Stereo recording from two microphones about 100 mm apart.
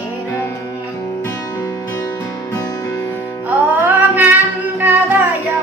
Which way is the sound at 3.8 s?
15° right (ahead or behind).